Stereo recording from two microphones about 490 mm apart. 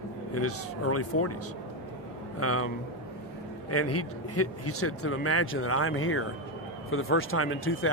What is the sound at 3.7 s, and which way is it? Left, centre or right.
Speech, left.